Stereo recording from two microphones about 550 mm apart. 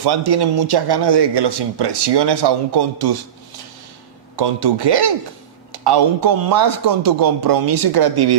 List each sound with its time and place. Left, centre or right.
0.0 s speech: right
4.4 s speech: right